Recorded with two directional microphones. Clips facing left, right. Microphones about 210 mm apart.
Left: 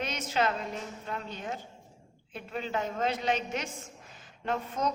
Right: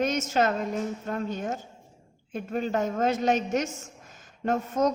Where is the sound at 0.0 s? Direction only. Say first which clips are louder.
Right 6 dB; 45° right (ahead or behind).